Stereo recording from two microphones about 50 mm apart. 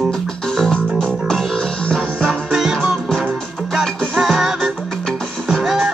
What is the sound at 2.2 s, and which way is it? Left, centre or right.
Music, centre.